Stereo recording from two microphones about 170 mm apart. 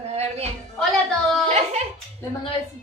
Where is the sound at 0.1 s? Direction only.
40° right (ahead or behind).